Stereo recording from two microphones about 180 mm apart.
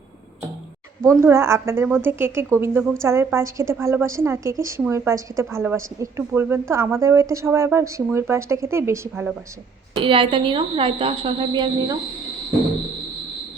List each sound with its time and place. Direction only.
1.0 s a woman's voice: 15° right (ahead or behind)
9.9 s a woman's voice: 30° right (ahead or behind)